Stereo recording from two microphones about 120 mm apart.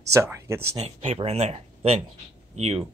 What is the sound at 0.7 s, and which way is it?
Speech, 55° right (ahead or behind).